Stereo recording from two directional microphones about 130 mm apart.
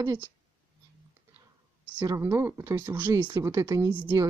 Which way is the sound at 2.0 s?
20° right (ahead or behind).